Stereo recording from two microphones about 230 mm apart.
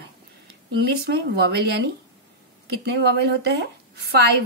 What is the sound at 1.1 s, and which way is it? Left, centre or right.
Speech, right.